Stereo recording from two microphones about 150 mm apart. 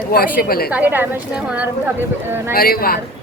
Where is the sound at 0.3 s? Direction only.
85° left.